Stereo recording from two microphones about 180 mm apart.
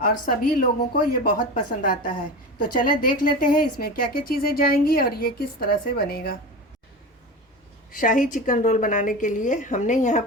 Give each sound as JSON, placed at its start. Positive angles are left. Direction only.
{"t": 0.0, "sound": "a woman's voice", "side_deg": 50}
{"t": 7.9, "sound": "a woman's voice", "side_deg": 50}